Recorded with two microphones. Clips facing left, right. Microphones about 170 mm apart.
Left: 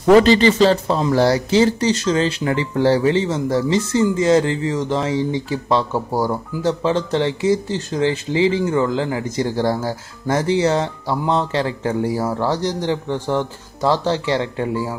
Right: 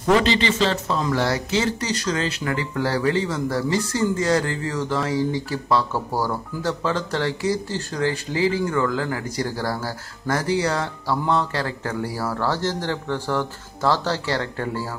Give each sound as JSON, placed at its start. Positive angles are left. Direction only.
{"t": 0.1, "sound": "speech", "side_deg": 45}